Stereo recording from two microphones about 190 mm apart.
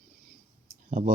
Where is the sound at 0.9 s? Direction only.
45° right (ahead or behind).